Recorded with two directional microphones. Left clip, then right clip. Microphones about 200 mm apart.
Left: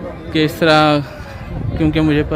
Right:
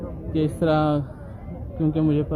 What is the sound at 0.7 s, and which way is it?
Speech, 5° left (ahead or behind).